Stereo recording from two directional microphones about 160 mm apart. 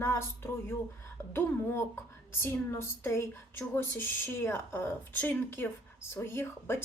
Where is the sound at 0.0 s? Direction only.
15° left (ahead or behind).